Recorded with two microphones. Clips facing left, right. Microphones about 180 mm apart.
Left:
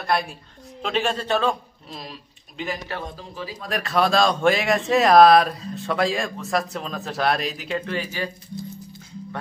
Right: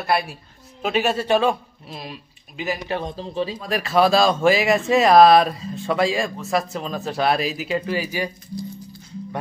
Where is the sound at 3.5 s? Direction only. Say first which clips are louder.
Right 2 dB; centre (ahead or behind).